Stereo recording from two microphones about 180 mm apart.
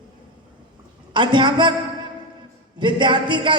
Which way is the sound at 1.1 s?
25° right (ahead or behind).